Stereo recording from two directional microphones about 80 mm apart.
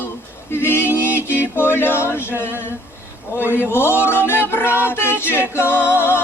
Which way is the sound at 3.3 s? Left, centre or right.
Left.